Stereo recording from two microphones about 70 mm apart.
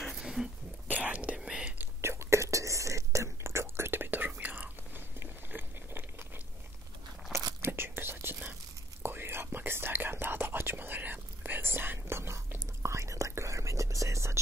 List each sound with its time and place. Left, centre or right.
0.1 s whispering: centre
0.8 s whispering: right
1.8 s whispering: right
4.4 s biting: right
7.6 s whispering: right